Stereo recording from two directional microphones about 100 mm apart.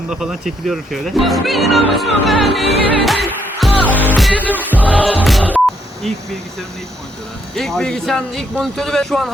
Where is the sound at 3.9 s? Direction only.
15° right (ahead or behind).